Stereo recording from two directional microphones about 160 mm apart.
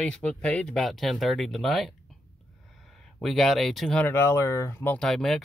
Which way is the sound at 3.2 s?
Centre (ahead or behind).